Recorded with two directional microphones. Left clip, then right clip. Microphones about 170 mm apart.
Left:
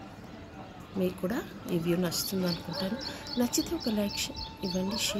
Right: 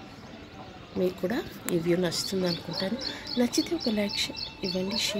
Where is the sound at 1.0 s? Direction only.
20° right (ahead or behind).